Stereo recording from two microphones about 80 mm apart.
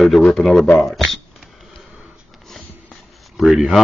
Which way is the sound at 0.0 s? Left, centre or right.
Centre.